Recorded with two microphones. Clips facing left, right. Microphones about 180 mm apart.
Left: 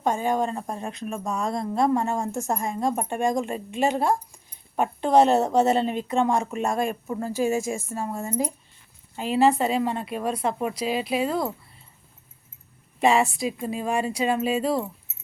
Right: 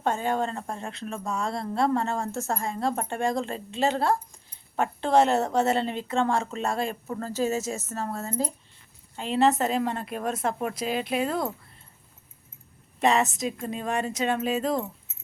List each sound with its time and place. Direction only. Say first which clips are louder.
0.0 s a woman's voice: left 2 dB; 10° left (ahead or behind)
13.0 s a woman's voice: left 2 dB; 5° left (ahead or behind)